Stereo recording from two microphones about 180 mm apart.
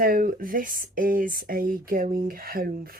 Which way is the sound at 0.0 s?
50° right (ahead or behind).